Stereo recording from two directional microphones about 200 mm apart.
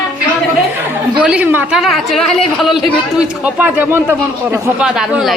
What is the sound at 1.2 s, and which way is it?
Speech, 5° right (ahead or behind).